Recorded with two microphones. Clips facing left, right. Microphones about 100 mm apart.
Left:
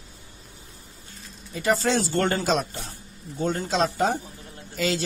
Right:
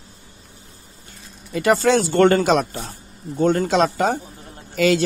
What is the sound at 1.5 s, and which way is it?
A man's voice, 75° right (ahead or behind).